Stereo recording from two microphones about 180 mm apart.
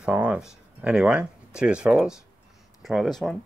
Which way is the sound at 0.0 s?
5° right (ahead or behind).